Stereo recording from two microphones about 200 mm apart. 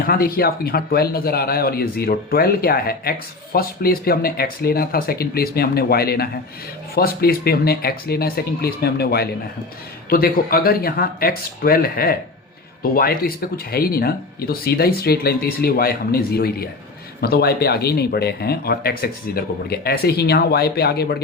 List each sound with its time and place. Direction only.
0.0 s speech: 45° left (ahead or behind)